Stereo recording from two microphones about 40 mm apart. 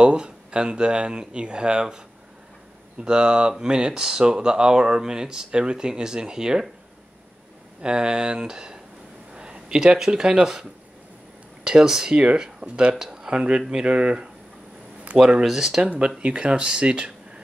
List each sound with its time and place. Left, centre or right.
0.0 s speech: right
7.8 s speech: centre
9.3 s a sound: centre
9.9 s speech: centre
12.6 s speech: right
13.0 s speech: centre
13.8 s speech: right
15.4 s speech: centre
16.2 s speech: right